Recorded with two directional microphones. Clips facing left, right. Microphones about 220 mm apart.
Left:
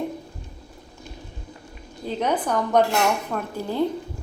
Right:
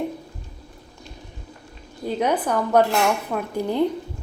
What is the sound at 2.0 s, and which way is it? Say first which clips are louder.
Speech: right 2 dB; 10° right (ahead or behind).